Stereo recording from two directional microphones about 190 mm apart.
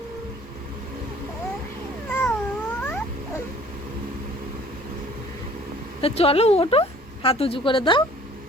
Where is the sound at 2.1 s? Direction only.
10° left (ahead or behind).